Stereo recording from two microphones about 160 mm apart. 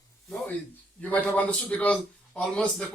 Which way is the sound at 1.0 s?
10° left (ahead or behind).